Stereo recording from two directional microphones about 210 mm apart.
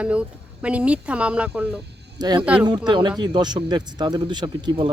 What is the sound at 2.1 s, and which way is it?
Speech, 20° right (ahead or behind).